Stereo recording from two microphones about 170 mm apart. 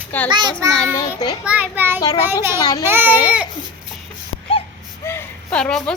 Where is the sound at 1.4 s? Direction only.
10° right (ahead or behind).